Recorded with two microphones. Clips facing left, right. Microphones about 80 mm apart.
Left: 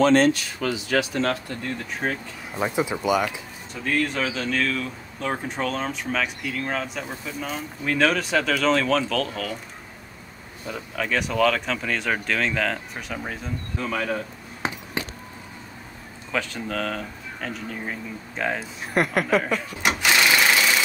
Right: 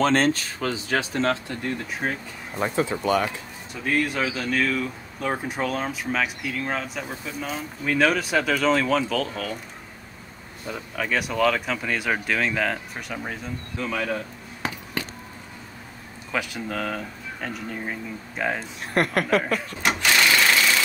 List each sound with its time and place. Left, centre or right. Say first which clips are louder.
0.0 s speech: left 3 dB; right
2.0 s speech: left 1 dB; centre
2.6 s speech: even; centre
4.0 s speech: even; centre
10.7 s speech: even; centre
14.6 s a sound: left 1 dB; left
16.3 s speech: left 1 dB; centre